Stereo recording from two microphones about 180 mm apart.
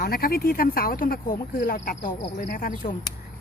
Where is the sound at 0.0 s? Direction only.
55° left (ahead or behind).